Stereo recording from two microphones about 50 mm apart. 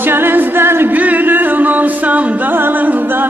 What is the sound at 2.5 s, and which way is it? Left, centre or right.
Music, right.